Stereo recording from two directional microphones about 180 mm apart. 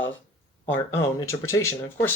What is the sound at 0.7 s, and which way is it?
Speech, 15° left (ahead or behind).